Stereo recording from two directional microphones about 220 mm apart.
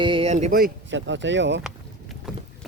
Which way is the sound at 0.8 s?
55° right (ahead or behind).